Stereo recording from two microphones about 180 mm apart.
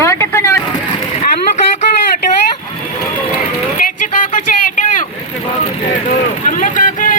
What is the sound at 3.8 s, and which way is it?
Vehicle, 45° left (ahead or behind).